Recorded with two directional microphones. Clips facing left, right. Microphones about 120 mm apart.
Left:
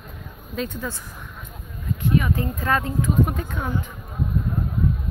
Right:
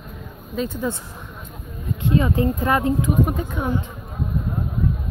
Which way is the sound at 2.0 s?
25° right (ahead or behind).